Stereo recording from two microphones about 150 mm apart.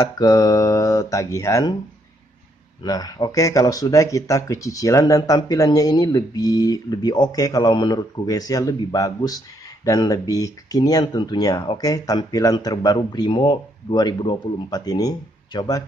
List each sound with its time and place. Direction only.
0.2 s speech: 25° left (ahead or behind)
2.8 s speech: 25° left (ahead or behind)